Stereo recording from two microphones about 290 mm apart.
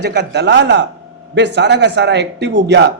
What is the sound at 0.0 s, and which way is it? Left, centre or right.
Speech, right.